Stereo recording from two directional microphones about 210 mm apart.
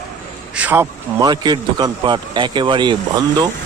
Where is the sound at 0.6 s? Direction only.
10° right (ahead or behind).